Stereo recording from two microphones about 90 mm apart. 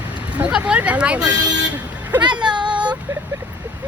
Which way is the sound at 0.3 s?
15° right (ahead or behind).